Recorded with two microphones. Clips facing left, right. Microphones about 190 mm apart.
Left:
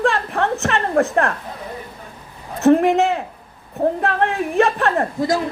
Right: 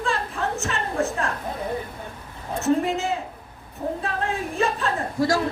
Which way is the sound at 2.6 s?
65° left (ahead or behind).